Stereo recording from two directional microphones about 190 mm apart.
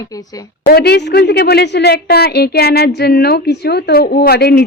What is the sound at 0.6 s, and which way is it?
A woman's voice, 55° left (ahead or behind).